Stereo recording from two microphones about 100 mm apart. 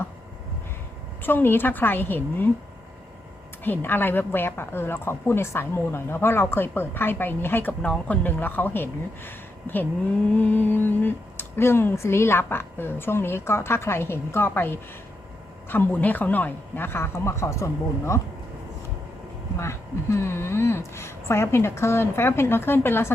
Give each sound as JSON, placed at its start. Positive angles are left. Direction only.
{"t": 1.2, "sound": "a woman's voice", "side_deg": 20}
{"t": 3.6, "sound": "a woman's voice", "side_deg": 20}
{"t": 19.5, "sound": "a woman's voice", "side_deg": 30}